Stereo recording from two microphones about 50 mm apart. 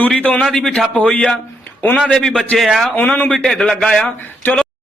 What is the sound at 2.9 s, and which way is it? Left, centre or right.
Speech, left.